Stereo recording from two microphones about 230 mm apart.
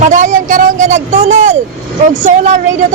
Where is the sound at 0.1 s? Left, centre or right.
Right.